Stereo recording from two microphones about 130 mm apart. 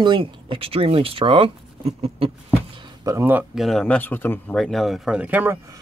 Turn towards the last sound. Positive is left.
turn(degrees=-15)  # may be behind; listen again after turning